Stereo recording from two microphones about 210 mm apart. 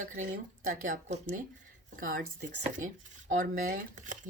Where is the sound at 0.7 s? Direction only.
40° right (ahead or behind).